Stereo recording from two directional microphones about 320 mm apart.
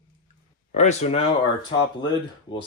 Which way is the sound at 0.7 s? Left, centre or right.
Left.